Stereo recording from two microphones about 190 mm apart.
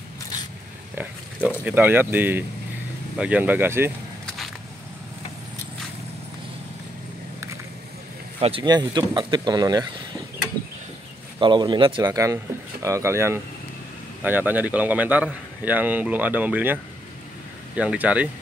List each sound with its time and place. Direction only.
1.6 s speech: 10° right (ahead or behind)
8.4 s speech: 30° right (ahead or behind)
11.3 s speech: 25° right (ahead or behind); by 18.3 s 5° right (ahead or behind)